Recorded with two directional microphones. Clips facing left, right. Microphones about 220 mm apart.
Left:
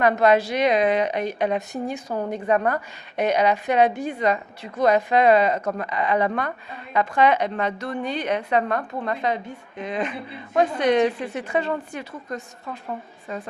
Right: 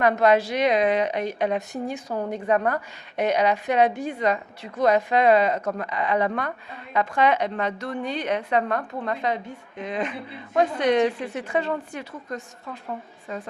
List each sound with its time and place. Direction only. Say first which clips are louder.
0.0 s a woman's voice: left 1 dB; 15° left (ahead or behind)